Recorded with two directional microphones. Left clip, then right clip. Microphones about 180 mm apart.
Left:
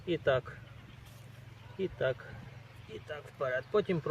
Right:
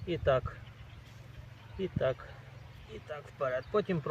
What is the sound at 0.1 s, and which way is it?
Speech, 40° left (ahead or behind).